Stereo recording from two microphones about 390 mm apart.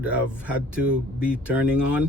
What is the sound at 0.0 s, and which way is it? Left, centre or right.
Speech, centre.